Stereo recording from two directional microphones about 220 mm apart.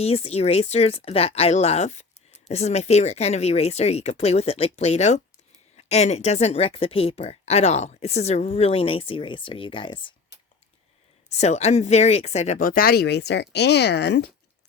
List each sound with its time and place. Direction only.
0.0 s speech: 30° left (ahead or behind)
11.3 s speech: 30° left (ahead or behind); by 14.3 s 50° left (ahead or behind)